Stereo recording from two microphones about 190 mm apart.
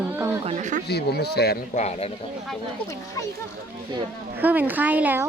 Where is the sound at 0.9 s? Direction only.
60° left (ahead or behind).